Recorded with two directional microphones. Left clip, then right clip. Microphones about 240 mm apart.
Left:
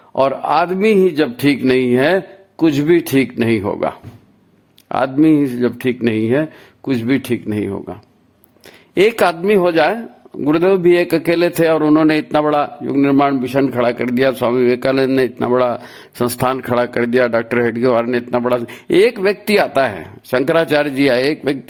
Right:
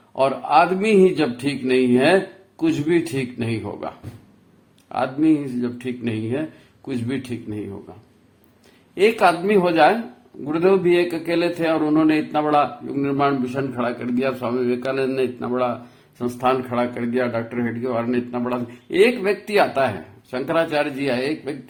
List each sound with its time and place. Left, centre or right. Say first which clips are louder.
0.2 s speech: left 2 dB; left
9.0 s a man's voice: left 3 dB; left